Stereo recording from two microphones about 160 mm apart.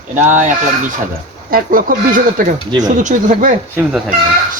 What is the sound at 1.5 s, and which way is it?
A man's voice, 65° right (ahead or behind).